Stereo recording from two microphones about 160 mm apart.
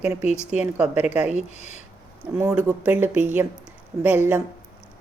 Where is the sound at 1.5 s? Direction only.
45° left (ahead or behind).